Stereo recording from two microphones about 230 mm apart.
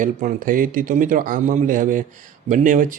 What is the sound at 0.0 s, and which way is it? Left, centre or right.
Speech, right.